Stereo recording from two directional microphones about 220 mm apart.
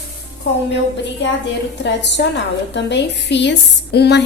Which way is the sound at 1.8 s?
50° left (ahead or behind).